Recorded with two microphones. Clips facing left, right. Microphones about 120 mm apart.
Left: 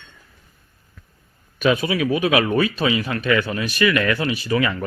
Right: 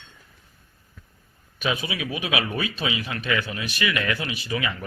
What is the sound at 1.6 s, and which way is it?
Speech, 50° left (ahead or behind).